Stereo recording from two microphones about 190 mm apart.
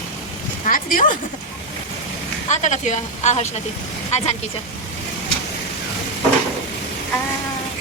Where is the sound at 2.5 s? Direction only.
40° left (ahead or behind).